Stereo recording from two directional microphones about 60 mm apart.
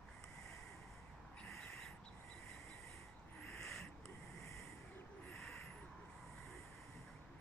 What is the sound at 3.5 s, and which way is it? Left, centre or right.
Owl, centre.